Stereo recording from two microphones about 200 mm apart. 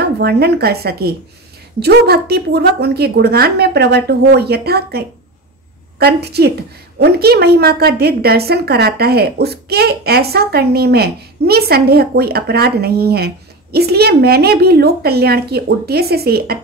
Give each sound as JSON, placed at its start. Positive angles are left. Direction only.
{"t": 0.0, "sound": "a woman's voice", "side_deg": -55}